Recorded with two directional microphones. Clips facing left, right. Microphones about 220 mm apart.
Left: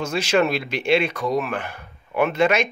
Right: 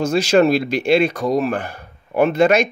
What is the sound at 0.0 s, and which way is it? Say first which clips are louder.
Speech: right 6 dB; 35° right (ahead or behind).